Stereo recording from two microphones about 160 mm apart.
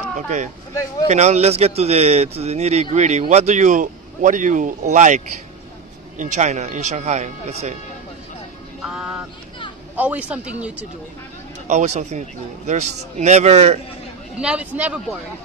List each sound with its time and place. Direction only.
1.0 s speech: 45° right (ahead or behind)
8.8 s music: 5° right (ahead or behind)
9.9 s a man's voice: 10° right (ahead or behind)
11.6 s speech: 45° right (ahead or behind)
14.4 s a man's voice: 10° right (ahead or behind)